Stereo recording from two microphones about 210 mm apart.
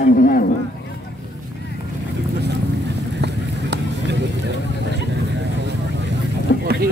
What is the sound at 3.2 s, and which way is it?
Run, 55° right (ahead or behind).